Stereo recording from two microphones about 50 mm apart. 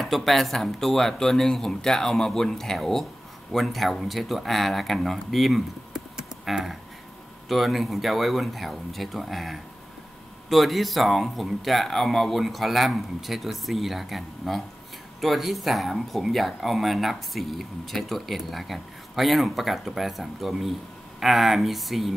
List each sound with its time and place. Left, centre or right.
0.0 s speech: centre